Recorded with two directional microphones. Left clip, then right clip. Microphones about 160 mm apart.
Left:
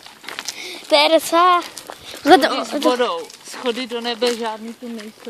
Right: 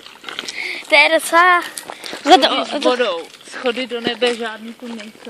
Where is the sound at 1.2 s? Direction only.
20° left (ahead or behind).